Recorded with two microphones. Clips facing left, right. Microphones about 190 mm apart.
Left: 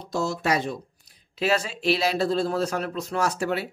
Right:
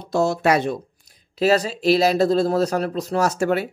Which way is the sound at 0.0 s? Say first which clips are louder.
Right 7 dB; 65° right (ahead or behind).